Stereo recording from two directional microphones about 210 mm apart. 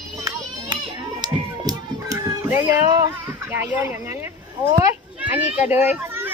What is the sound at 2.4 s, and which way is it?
Speech, 10° right (ahead or behind).